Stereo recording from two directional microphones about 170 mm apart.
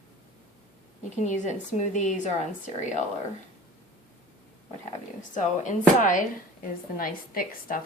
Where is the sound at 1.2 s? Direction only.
45° left (ahead or behind).